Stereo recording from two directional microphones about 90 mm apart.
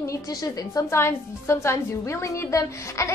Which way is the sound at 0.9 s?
30° left (ahead or behind).